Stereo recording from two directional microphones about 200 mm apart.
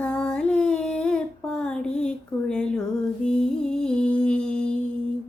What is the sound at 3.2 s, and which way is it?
Music, 5° left (ahead or behind).